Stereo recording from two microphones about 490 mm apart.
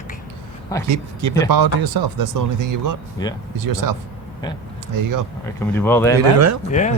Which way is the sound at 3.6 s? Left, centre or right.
Right.